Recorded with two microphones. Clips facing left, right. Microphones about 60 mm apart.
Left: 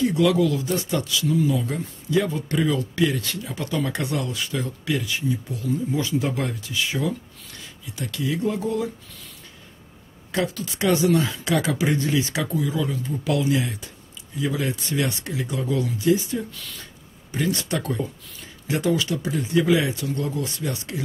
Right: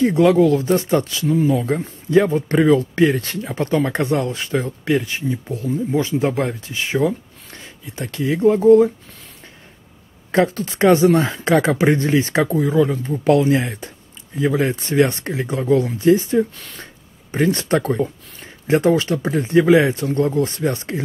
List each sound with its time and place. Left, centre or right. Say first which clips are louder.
0.0 s speech: right 6 dB; right
10.3 s speech: right 8 dB; right